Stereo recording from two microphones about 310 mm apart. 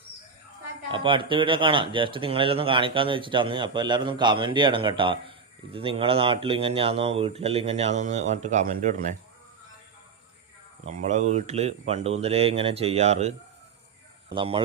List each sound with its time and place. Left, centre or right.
0.9 s speech: centre
10.8 s speech: right
14.3 s speech: centre